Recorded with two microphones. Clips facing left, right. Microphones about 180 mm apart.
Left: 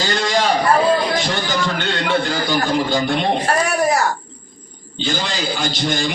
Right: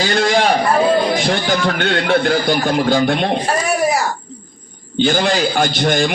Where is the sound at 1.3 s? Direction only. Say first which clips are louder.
Right 4 dB; 55° right (ahead or behind).